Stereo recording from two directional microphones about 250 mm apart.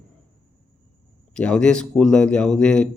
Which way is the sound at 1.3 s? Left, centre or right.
Centre.